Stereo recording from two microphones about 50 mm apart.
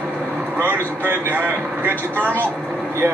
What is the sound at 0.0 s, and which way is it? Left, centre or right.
Vehicle, right.